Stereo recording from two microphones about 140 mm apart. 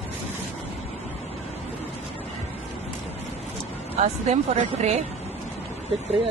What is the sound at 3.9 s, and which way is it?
Speech, 50° right (ahead or behind).